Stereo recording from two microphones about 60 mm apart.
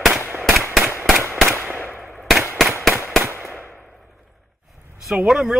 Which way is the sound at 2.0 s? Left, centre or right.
Centre.